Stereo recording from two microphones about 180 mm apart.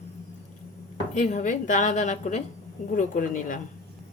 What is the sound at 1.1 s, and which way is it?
Speech, 40° left (ahead or behind).